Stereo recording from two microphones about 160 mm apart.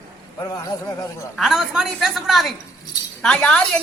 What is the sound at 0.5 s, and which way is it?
Speech, 20° left (ahead or behind).